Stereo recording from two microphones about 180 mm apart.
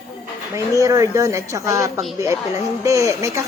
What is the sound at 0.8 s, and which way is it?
A woman's voice, 15° right (ahead or behind).